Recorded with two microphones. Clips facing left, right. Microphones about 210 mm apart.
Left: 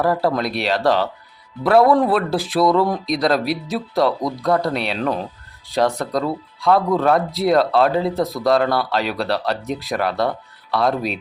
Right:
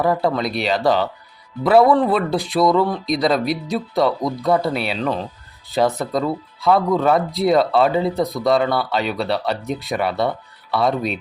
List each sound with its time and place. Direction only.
0.0 s speech: centre (ahead or behind)